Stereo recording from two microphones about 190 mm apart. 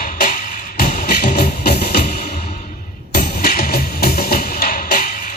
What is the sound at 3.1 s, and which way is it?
Music, 55° left (ahead or behind).